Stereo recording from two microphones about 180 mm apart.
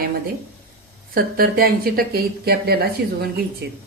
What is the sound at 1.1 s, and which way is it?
A woman's voice, 55° right (ahead or behind).